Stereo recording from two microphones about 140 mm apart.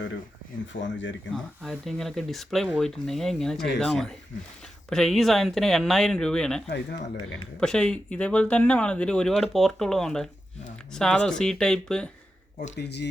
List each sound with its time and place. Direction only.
0.7 s speech: 75° left (ahead or behind)
1.3 s speech: centre (ahead or behind)